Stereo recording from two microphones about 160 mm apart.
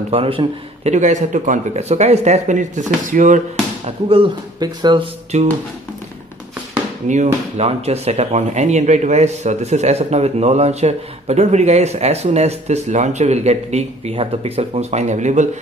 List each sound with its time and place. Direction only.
0.1 s speech: 35° right (ahead or behind)
0.9 s speech: 50° right (ahead or behind)
3.8 s speech: 35° right (ahead or behind)
5.3 s speech: 45° right (ahead or behind)
7.1 s speech: 45° right (ahead or behind)